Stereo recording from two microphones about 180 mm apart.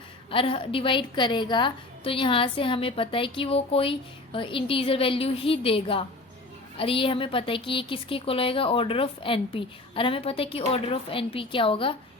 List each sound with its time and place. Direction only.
0.3 s a woman's voice: 30° left (ahead or behind)